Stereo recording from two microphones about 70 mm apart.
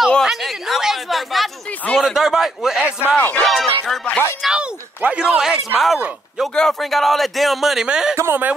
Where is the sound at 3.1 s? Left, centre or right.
Left.